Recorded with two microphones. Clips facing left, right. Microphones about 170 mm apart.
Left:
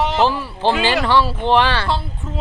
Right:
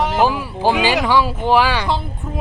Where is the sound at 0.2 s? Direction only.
10° right (ahead or behind).